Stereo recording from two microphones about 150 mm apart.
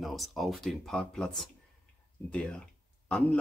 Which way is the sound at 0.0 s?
Centre (ahead or behind).